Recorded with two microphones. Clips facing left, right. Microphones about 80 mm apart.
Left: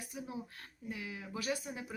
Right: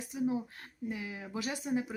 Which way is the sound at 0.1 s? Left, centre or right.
Right.